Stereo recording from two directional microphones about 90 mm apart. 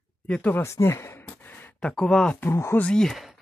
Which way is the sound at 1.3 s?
20° left (ahead or behind).